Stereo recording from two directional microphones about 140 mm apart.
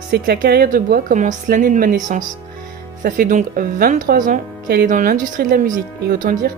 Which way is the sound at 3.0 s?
85° right.